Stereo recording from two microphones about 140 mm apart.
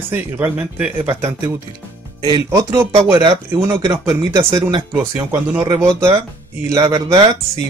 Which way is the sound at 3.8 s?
20° right (ahead or behind).